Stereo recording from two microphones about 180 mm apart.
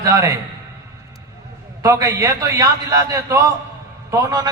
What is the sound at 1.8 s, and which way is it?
A man's voice, 15° right (ahead or behind).